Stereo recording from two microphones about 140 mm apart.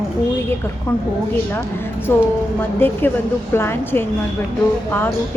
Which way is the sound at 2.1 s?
15° left (ahead or behind).